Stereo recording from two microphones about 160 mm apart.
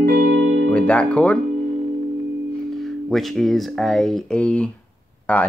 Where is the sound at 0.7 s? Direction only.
10° left (ahead or behind).